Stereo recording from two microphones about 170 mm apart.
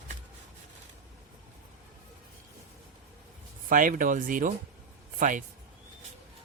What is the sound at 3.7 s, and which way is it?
A man's voice, 50° right (ahead or behind).